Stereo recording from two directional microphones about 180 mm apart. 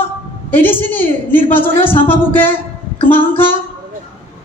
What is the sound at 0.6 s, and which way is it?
A woman's voice, 10° left (ahead or behind).